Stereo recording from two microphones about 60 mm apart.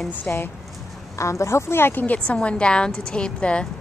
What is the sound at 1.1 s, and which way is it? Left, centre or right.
Speech, left.